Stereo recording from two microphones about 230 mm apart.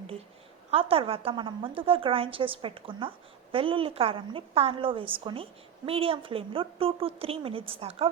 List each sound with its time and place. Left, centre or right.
0.7 s a woman's voice: right